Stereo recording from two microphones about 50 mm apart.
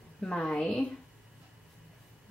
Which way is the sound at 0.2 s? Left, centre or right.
Centre.